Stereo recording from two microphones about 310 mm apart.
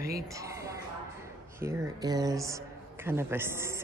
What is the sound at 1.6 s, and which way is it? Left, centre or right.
Speech, centre.